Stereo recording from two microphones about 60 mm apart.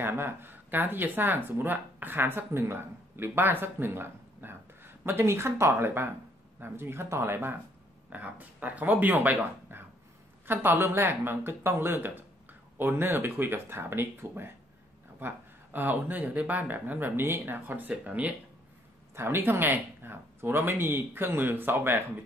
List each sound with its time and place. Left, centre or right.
0.0 s speech: right
8.1 s speech: right
19.1 s speech: right